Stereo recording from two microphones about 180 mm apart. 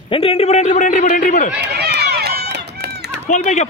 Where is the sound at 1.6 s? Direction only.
65° right (ahead or behind).